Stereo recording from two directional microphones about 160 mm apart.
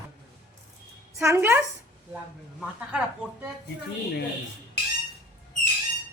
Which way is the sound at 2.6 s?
5° right (ahead or behind).